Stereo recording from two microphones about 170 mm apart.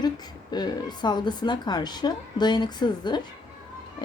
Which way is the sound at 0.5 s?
25° left (ahead or behind).